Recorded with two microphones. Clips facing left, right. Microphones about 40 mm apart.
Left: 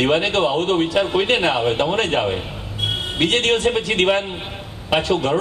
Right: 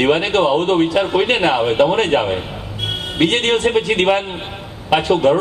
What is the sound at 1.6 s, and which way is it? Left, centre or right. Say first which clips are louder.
A man's voice: right 4 dB; right.